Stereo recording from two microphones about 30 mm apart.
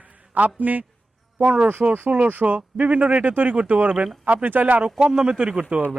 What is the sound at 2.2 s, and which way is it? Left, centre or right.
Speech, right.